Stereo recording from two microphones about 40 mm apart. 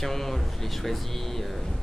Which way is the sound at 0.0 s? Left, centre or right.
Centre.